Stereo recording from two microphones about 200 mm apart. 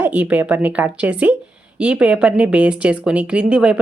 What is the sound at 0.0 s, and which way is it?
Speech, 10° right (ahead or behind).